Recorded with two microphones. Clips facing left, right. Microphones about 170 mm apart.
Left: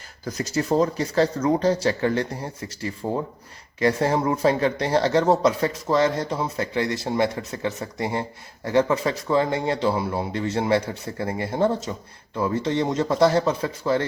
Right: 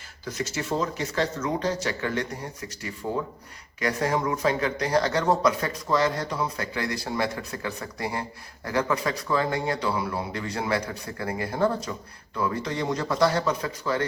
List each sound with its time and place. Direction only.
0.3 s speech: 35° left (ahead or behind)